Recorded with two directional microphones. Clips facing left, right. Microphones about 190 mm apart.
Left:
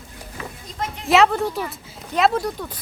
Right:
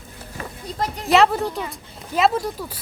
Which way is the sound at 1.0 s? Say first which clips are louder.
Even; centre (ahead or behind).